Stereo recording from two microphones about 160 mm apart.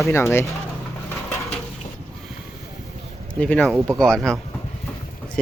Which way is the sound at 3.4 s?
5° left (ahead or behind).